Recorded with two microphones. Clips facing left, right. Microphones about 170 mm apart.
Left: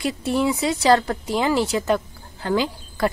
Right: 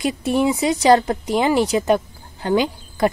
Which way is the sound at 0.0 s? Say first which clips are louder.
Right 3 dB; 20° right (ahead or behind).